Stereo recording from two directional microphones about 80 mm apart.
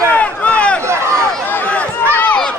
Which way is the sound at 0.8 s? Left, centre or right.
Right.